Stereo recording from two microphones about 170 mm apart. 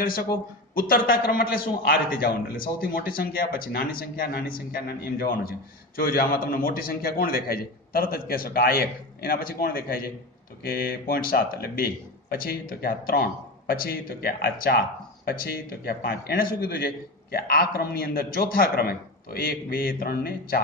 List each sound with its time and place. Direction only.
0.0 s a man's voice: 60° left (ahead or behind)